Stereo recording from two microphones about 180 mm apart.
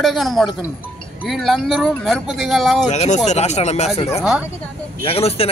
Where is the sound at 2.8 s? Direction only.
40° left (ahead or behind).